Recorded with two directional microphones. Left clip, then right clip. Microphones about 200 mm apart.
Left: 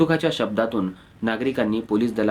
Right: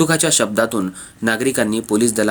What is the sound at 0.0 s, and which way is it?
Speech, 45° right (ahead or behind).